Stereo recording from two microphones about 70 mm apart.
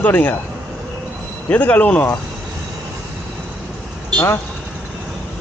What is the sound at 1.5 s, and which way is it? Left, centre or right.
Speech, left.